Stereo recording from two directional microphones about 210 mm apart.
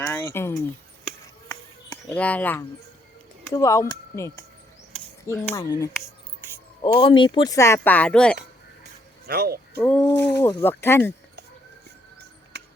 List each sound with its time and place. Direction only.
0.0 s a sound: 10° left (ahead or behind)
1.5 s music: 5° left (ahead or behind)
3.5 s speech: 15° left (ahead or behind)
9.2 s speech: 50° right (ahead or behind)
10.0 s speech: 15° left (ahead or behind)
12.5 s music: 55° right (ahead or behind)